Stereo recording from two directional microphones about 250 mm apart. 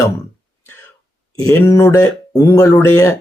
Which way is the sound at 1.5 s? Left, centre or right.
Centre.